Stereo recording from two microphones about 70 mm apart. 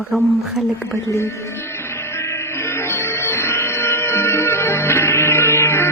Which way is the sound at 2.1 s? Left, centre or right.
Left.